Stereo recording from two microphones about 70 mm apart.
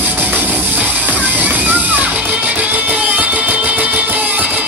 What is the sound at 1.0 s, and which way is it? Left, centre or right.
Music, right.